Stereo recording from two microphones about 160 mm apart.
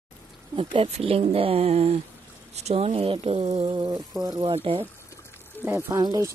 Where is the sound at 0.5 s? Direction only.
35° right (ahead or behind).